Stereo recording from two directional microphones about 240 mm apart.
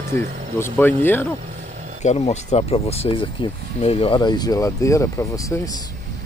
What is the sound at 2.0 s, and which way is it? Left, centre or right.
Speech, left.